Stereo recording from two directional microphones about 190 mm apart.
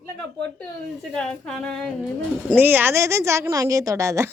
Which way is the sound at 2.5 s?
10° right (ahead or behind).